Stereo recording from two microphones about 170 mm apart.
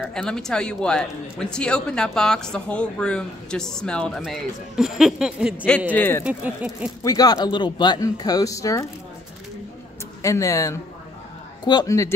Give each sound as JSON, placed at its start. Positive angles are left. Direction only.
{"t": 0.0, "sound": "speech", "side_deg": 0}
{"t": 5.9, "sound": "speech", "side_deg": 10}
{"t": 6.2, "sound": "speech", "side_deg": -5}
{"t": 7.0, "sound": "speech", "side_deg": 20}
{"t": 10.2, "sound": "speech", "side_deg": 20}